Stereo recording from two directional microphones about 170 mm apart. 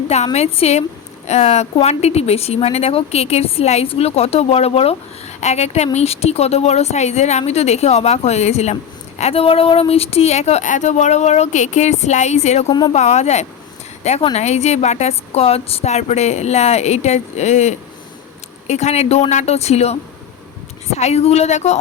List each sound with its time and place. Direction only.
0.3 s speech: 35° left (ahead or behind)